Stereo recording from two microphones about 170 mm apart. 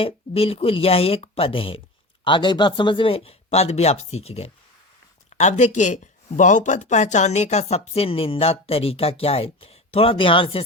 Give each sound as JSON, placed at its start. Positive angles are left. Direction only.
{"t": 0.0, "sound": "speech", "side_deg": 35}